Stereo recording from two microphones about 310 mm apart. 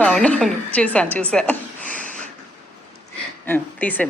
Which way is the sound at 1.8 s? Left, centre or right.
Right.